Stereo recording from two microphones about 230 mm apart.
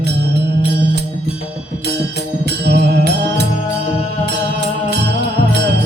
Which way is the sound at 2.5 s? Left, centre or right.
Right.